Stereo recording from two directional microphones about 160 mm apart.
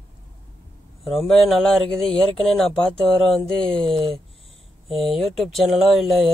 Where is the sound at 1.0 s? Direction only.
Centre (ahead or behind).